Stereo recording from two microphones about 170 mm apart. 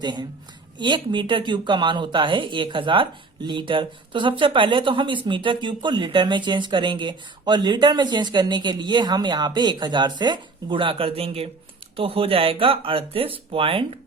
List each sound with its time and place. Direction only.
0.0 s speech: 25° right (ahead or behind)